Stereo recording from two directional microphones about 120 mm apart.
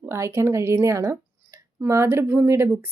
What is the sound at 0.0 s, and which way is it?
A woman's voice, 20° right (ahead or behind).